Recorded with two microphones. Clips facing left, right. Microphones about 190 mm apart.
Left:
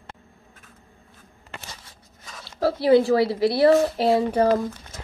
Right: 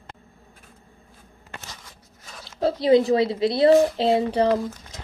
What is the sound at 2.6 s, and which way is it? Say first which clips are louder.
A woman's voice: even; 20° right (ahead or behind).